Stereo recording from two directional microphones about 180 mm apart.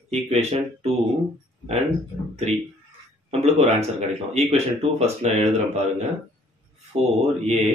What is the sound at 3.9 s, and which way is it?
Speech, 35° right (ahead or behind).